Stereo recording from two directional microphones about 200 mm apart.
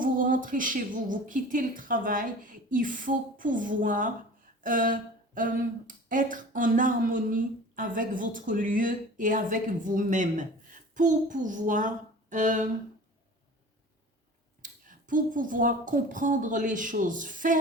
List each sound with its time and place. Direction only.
0.0 s speech: 40° right (ahead or behind)
14.6 s speech: 40° right (ahead or behind)